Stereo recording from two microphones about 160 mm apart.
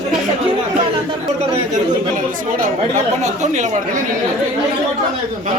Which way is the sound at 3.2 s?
45° right (ahead or behind).